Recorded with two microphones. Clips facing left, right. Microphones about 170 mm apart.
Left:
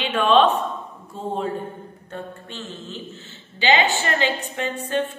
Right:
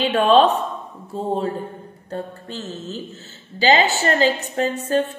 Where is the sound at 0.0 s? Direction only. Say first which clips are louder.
Right 3 dB; 40° right (ahead or behind).